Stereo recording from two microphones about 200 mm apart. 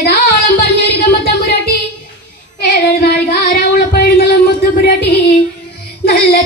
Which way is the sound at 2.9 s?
50° left (ahead or behind).